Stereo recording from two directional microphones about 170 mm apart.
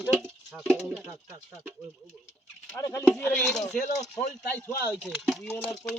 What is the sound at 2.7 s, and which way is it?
Speech, 20° left (ahead or behind).